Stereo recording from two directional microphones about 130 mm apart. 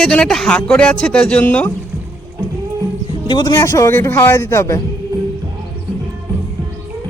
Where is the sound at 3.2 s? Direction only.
35° left (ahead or behind).